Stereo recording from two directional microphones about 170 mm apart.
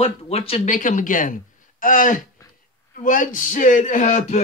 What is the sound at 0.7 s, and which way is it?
Speech, 50° left (ahead or behind).